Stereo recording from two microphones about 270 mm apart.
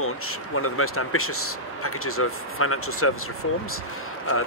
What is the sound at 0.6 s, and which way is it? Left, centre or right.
Speech, left.